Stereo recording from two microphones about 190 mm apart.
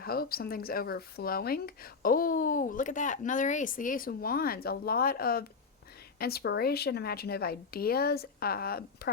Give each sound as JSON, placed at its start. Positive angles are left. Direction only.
{"t": 0.0, "sound": "a woman's voice", "side_deg": 50}